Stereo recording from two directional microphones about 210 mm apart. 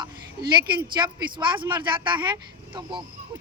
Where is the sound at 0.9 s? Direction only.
20° right (ahead or behind).